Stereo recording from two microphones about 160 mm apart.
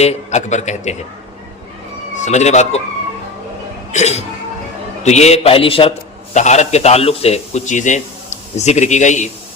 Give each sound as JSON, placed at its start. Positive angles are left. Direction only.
{"t": 0.0, "sound": "a man's voice", "side_deg": 45}
{"t": 2.1, "sound": "speech", "side_deg": 45}
{"t": 3.9, "sound": "a man's voice", "side_deg": 45}
{"t": 6.3, "sound": "a man's voice", "side_deg": 45}